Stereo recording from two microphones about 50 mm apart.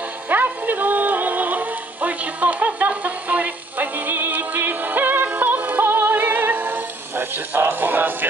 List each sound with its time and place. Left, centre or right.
0.3 s music: right
5.9 s music: right